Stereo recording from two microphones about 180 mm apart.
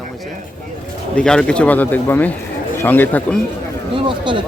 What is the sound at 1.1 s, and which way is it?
Speech, 5° left (ahead or behind).